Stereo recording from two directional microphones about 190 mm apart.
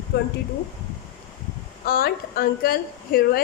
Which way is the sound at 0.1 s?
60° left (ahead or behind).